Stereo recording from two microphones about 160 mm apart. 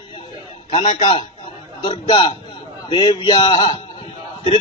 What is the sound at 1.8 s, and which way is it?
A man's voice, 30° left (ahead or behind).